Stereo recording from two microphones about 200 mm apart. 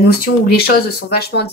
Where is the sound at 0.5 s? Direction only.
50° left (ahead or behind).